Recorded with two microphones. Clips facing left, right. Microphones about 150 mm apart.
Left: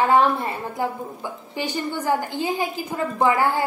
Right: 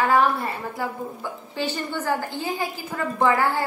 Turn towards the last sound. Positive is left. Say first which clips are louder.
# left 1 dB
turn(degrees=15)  # may be behind; listen again after turning